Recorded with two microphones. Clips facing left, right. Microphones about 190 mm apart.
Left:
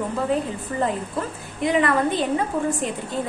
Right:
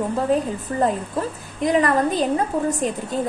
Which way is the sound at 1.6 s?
40° right (ahead or behind).